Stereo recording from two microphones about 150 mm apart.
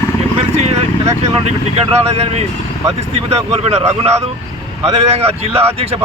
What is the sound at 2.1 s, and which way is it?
Speech, 45° right (ahead or behind).